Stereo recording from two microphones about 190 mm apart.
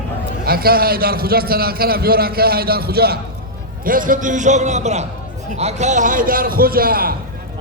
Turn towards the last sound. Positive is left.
turn(degrees=-50)  # may be behind; listen again after turning